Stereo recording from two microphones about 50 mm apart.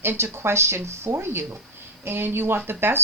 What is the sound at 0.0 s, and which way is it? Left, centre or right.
Speech, right.